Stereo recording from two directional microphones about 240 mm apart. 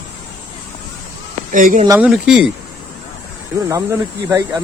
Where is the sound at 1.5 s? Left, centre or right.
Right.